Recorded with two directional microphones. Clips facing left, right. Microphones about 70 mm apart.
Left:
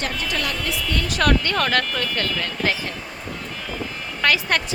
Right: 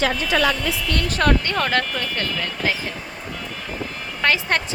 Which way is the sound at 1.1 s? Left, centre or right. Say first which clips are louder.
Even; right.